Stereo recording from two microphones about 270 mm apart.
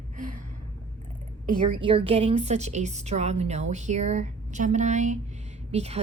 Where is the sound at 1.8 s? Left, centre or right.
Right.